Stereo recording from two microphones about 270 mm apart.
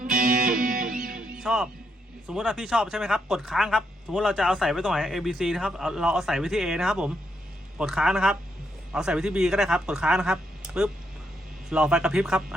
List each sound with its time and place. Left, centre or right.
0.0 s music: right
1.4 s speech: centre